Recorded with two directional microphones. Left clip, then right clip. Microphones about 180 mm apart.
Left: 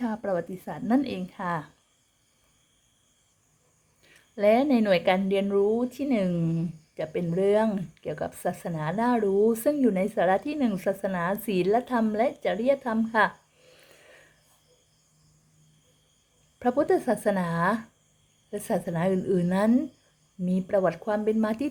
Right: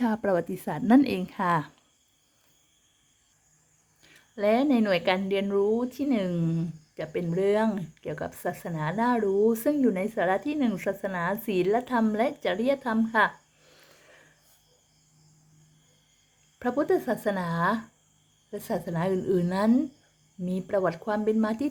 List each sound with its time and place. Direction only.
0.0 s a woman's voice: 20° right (ahead or behind)
4.0 s a woman's voice: centre (ahead or behind)
13.7 s a sound: 5° left (ahead or behind)
16.6 s a woman's voice: 5° left (ahead or behind)